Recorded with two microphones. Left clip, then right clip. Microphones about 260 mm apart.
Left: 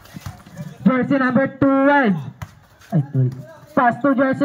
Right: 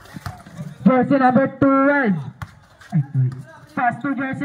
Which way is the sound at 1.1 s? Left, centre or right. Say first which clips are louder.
Right 2 dB; centre.